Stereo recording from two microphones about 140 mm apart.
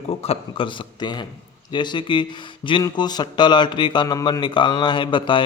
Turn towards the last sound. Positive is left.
turn(degrees=35)  # may be behind; listen again after turning